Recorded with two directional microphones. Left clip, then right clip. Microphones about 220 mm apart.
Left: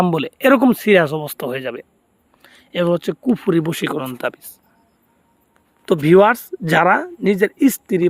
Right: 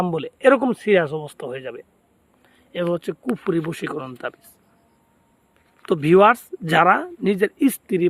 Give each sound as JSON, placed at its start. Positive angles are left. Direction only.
{"t": 0.0, "sound": "speech", "side_deg": 50}
{"t": 5.8, "sound": "speech", "side_deg": 20}